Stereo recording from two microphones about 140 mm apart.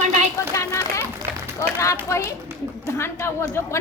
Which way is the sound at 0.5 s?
20° left (ahead or behind).